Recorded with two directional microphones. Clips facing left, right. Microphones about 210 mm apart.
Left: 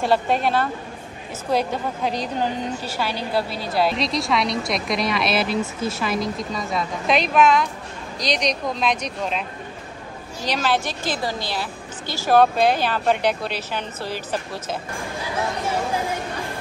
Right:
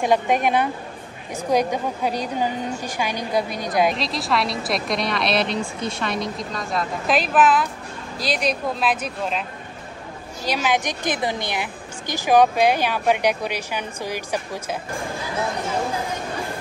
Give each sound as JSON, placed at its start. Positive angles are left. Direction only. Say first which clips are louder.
{"t": 0.0, "sound": "a woman's voice", "louder": "right 1 dB", "side_deg": -15}
{"t": 3.9, "sound": "a woman's voice", "louder": "left 1 dB", "side_deg": 0}
{"t": 10.4, "sound": "a woman's voice", "louder": "even", "side_deg": -10}